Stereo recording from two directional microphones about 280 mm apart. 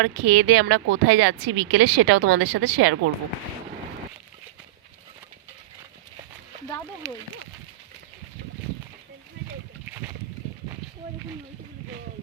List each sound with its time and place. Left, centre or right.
0.0 s speech: right